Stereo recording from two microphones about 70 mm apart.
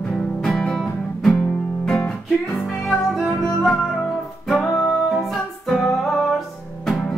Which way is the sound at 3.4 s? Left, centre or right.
Centre.